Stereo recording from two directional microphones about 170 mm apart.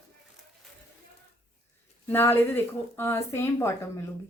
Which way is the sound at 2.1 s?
10° left (ahead or behind).